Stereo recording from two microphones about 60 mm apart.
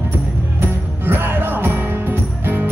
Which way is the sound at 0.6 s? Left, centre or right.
Right.